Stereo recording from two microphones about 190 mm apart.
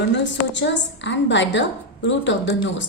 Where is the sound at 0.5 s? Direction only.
70° left (ahead or behind).